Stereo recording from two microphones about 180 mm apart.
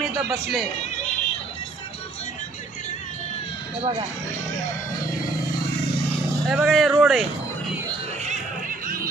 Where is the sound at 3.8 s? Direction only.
35° right (ahead or behind).